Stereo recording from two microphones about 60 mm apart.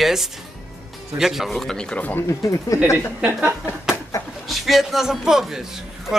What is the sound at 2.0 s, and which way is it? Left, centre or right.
Speech, left.